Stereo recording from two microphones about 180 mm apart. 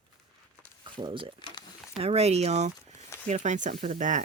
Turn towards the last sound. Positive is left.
turn(degrees=-45)  # may be behind; listen again after turning